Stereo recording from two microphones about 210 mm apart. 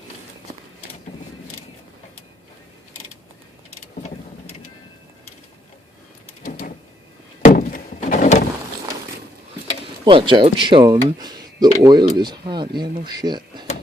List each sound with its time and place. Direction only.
6.4 s a sound: 40° left (ahead or behind)
7.4 s door: 40° left (ahead or behind)
10.1 s speech: 25° right (ahead or behind)